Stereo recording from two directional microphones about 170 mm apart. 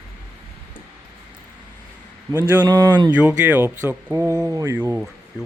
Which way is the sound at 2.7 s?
25° right (ahead or behind).